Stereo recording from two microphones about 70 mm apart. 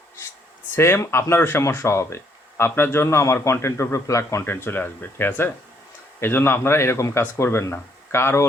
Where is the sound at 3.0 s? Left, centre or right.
Left.